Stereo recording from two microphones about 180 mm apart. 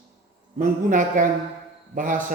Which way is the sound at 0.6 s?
45° right (ahead or behind).